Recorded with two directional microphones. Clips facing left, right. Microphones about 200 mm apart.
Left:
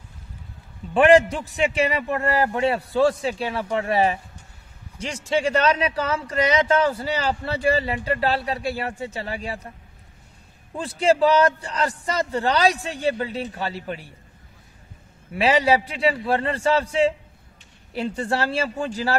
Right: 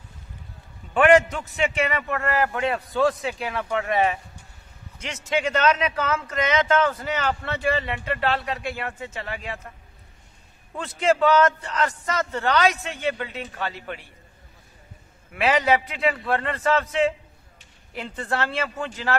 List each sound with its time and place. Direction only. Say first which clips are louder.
0.9 s a man's voice: left 2 dB; 30° left (ahead or behind)
10.8 s speech: left 2 dB; 30° left (ahead or behind)
15.3 s speech: left 2 dB; 30° left (ahead or behind)